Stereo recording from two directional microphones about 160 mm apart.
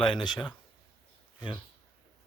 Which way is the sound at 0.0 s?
30° left (ahead or behind).